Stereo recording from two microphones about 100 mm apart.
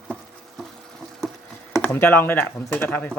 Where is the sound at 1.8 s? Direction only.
20° left (ahead or behind).